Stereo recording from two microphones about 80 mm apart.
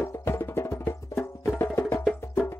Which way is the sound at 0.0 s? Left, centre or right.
Left.